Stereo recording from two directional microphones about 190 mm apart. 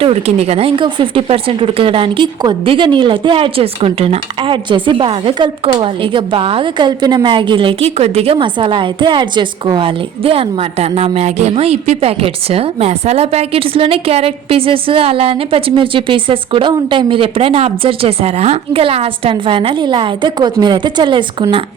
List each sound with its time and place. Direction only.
0.0 s speech: 30° right (ahead or behind)